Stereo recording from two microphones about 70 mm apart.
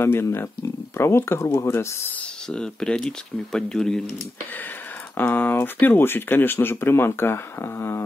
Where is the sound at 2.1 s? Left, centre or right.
Centre.